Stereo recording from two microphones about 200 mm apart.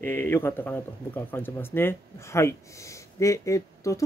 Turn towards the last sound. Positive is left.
turn(degrees=15)  # may be behind; listen again after turning